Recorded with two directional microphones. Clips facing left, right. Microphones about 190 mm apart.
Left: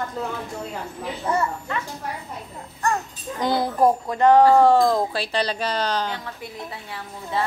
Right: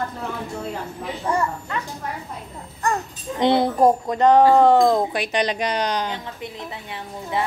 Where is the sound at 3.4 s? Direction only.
25° right (ahead or behind).